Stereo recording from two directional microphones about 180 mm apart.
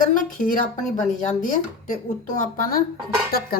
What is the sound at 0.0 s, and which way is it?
A woman's voice, 45° left (ahead or behind).